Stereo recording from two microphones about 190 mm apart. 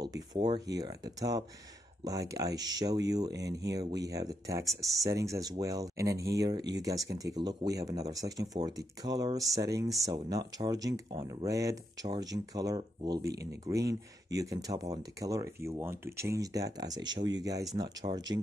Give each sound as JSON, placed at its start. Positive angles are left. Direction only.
{"t": 0.0, "sound": "speech", "side_deg": -20}
{"t": 13.3, "sound": "speech", "side_deg": -60}
{"t": 13.7, "sound": "speech", "side_deg": -15}